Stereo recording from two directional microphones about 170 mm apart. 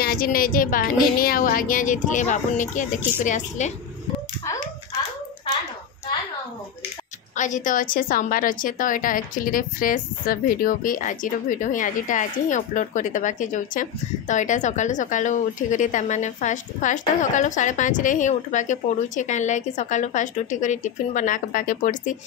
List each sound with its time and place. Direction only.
0.0 s a woman's voice: 60° left (ahead or behind); by 3.7 s 45° left (ahead or behind)
7.3 s a woman's voice: 45° left (ahead or behind)